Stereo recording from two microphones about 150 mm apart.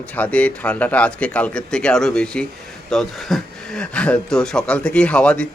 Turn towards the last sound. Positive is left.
turn(degrees=5)  # may be behind; listen again after turning